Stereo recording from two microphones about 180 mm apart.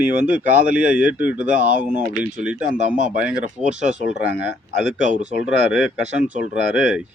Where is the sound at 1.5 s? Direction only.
45° right (ahead or behind).